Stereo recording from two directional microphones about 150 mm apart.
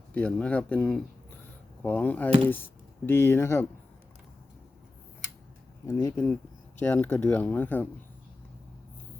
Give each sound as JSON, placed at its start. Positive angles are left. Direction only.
{"t": 0.1, "sound": "speech", "side_deg": 10}
{"t": 5.8, "sound": "speech", "side_deg": 20}